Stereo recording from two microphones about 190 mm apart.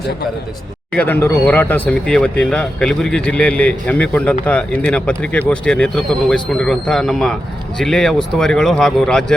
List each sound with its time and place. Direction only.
0.9 s a man's voice: 10° left (ahead or behind)